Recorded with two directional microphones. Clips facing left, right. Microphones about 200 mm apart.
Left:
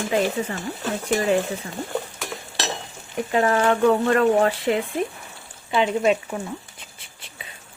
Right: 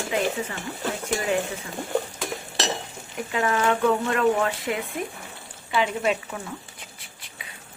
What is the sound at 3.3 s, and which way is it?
Speech, 45° left (ahead or behind).